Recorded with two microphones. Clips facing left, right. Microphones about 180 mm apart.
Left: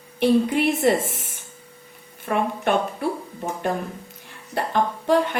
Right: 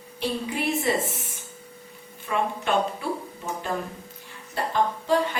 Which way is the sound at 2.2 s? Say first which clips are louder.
Left 4 dB; 55° left (ahead or behind).